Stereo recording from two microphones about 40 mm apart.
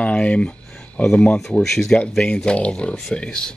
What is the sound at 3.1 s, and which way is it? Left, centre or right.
Speech, centre.